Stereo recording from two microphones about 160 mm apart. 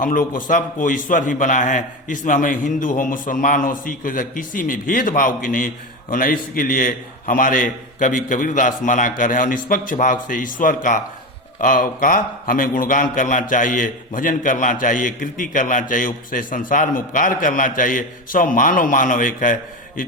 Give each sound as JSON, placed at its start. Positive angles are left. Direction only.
{"t": 0.0, "sound": "a man's voice", "side_deg": 55}